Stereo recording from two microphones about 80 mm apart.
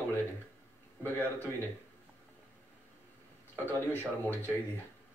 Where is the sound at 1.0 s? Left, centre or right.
Left.